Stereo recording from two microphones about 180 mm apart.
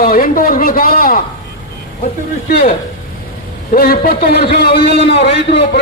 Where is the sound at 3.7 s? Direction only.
55° left (ahead or behind).